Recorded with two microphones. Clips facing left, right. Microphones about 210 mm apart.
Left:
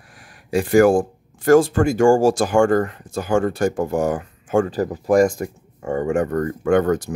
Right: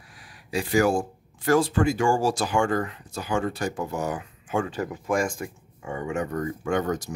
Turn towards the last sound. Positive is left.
turn(degrees=55)  # may be behind; listen again after turning